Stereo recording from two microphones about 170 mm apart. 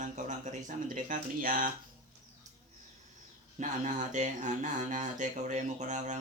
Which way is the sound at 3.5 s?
45° right (ahead or behind).